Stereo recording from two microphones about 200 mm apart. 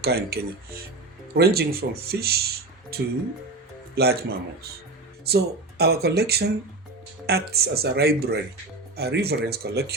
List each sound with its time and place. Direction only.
0.0 s speech: 50° right (ahead or behind)